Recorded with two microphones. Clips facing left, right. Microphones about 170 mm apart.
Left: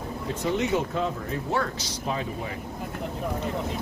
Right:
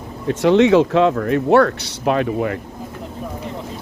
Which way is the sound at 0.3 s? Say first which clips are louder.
Right 13 dB; 90° right.